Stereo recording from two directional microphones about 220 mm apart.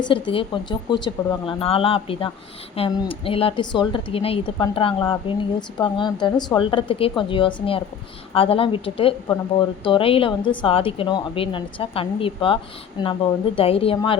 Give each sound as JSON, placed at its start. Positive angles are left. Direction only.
{"t": 0.0, "sound": "speech", "side_deg": 25}